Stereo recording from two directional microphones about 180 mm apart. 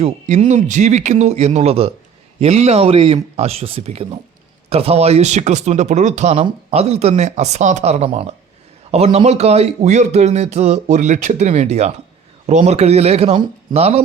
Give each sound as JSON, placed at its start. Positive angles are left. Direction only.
{"t": 0.0, "sound": "speech", "side_deg": -40}